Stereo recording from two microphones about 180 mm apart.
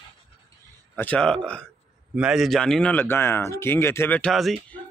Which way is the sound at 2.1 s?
5° right (ahead or behind).